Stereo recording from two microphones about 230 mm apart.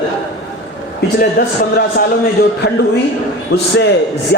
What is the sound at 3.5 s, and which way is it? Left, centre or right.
Speech, left.